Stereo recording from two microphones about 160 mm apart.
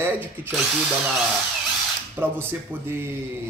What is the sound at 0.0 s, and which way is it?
Speech, 10° right (ahead or behind).